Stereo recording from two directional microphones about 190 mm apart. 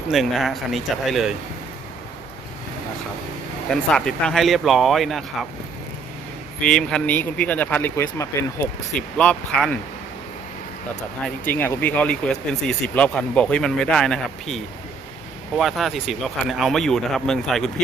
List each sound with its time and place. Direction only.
0.1 s speech: centre (ahead or behind)
3.7 s speech: 5° left (ahead or behind)
6.6 s speech: 5° left (ahead or behind)
11.4 s speech: 10° left (ahead or behind)